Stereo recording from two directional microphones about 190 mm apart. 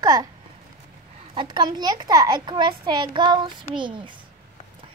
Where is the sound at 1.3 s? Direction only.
20° right (ahead or behind).